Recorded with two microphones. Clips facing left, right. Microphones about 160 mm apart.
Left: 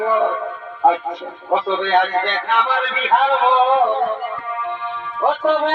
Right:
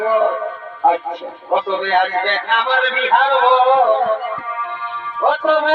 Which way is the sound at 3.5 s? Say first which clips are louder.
Right 3 dB; 90° right.